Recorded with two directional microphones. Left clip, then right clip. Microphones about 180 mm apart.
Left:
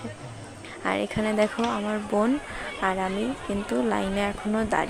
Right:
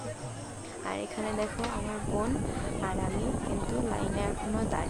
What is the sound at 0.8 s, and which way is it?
Speech, 45° left (ahead or behind).